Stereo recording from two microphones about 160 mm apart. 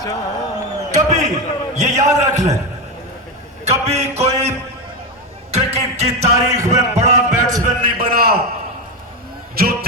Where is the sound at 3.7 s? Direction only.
40° right (ahead or behind).